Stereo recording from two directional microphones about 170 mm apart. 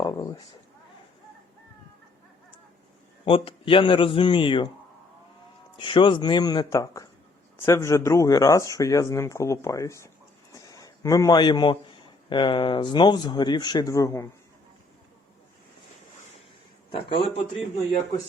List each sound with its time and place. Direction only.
0.0 s a sound: 25° left (ahead or behind)
3.2 s a man's voice: 30° left (ahead or behind)
5.8 s a man's voice: 30° left (ahead or behind)
16.9 s a man's voice: 30° left (ahead or behind)